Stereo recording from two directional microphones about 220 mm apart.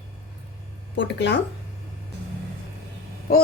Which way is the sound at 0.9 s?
50° left (ahead or behind).